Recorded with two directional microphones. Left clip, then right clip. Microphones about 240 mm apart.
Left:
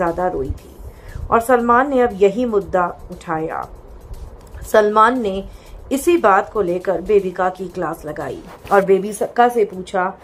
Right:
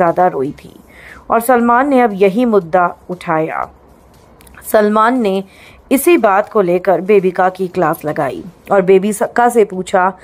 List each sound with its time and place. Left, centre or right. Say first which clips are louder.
0.0 s speech: right 7 dB; right